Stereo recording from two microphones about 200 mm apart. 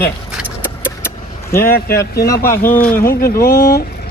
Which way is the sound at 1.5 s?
50° left (ahead or behind).